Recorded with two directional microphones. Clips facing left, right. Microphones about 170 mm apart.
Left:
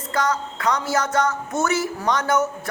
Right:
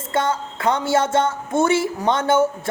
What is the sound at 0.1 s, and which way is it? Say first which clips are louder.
Speech: right 2 dB; 25° right (ahead or behind).